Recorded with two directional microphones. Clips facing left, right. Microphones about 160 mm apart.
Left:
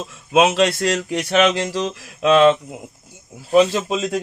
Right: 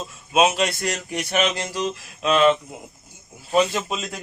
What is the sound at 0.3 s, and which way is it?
Speech, 90° left.